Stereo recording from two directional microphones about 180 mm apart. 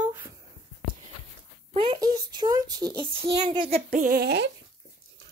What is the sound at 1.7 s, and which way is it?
Babbling, 30° right (ahead or behind).